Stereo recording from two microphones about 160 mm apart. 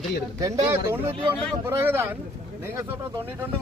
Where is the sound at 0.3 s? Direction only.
20° right (ahead or behind).